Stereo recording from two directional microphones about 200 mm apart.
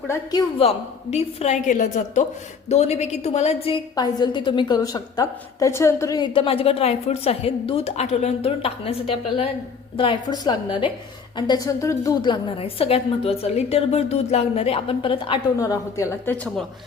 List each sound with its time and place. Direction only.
0.1 s a woman's voice: 20° left (ahead or behind)
1.1 s a woman's voice: 35° left (ahead or behind); by 16.6 s 10° left (ahead or behind)